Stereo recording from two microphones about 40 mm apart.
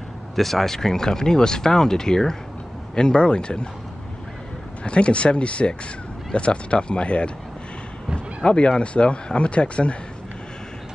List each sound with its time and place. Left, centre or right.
0.4 s speech: centre; by 3.6 s left
4.8 s speech: left
8.5 s speech: left